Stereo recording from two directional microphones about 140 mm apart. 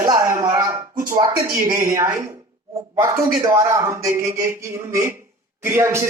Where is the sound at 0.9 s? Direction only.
75° right (ahead or behind).